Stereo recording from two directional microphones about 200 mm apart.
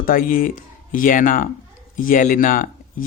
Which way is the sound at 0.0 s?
45° left (ahead or behind).